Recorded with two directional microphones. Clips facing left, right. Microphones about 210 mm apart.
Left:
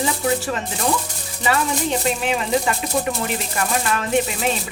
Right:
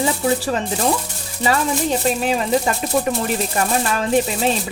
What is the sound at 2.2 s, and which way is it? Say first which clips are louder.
Speech: right 2 dB; 40° right (ahead or behind).